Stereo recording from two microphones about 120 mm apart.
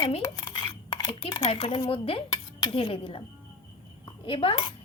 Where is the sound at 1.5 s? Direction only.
50° left (ahead or behind).